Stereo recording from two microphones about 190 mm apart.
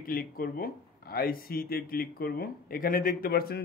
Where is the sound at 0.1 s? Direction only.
50° left (ahead or behind).